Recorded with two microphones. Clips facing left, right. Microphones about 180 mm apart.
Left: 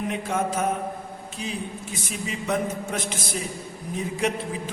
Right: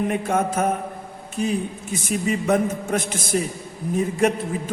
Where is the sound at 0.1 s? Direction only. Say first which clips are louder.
Right 4 dB; 50° right (ahead or behind).